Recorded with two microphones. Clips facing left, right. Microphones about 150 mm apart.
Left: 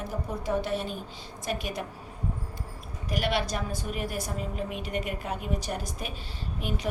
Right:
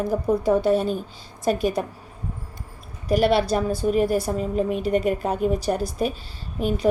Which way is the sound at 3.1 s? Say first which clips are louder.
Right 10 dB; 35° right (ahead or behind).